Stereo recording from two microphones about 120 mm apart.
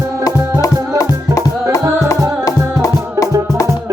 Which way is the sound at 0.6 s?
30° left (ahead or behind).